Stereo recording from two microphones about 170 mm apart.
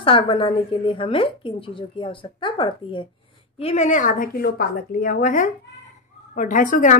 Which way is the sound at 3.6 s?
40° left (ahead or behind).